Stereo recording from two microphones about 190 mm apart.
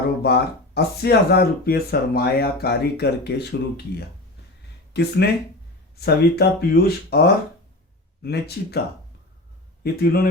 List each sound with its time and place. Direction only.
0.2 s speech: 55° left (ahead or behind)
4.9 s speech: 60° left (ahead or behind)
9.8 s speech: 55° left (ahead or behind)